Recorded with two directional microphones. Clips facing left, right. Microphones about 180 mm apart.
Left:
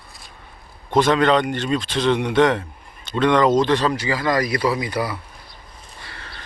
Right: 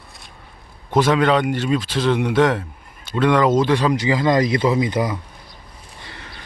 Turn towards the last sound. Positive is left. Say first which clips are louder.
# right 1 dB
turn(degrees=-15)  # may be behind; listen again after turning